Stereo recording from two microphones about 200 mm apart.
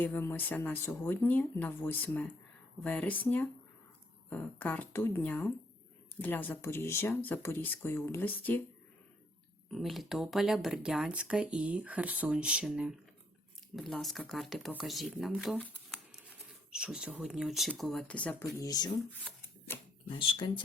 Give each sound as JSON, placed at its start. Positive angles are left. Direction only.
{"t": 0.0, "sound": "speech", "side_deg": 10}
{"t": 9.7, "sound": "speech", "side_deg": 0}
{"t": 20.1, "sound": "speech", "side_deg": 25}